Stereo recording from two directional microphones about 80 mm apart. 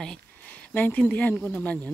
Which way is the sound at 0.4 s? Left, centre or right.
Left.